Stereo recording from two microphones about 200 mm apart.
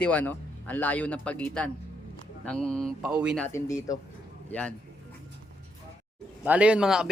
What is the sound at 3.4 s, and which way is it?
A man's voice, 15° left (ahead or behind).